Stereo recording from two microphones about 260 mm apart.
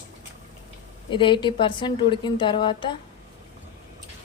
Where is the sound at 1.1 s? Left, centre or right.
Centre.